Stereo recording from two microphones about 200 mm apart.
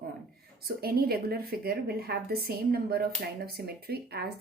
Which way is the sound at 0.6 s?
50° right (ahead or behind).